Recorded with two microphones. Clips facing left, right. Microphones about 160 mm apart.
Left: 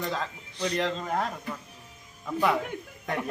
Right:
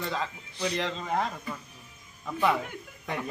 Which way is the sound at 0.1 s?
5° right (ahead or behind).